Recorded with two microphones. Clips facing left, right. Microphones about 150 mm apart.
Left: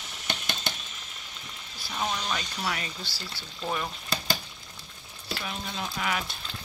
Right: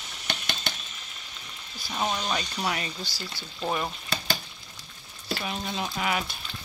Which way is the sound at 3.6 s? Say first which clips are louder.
Right 3 dB; 15° right (ahead or behind).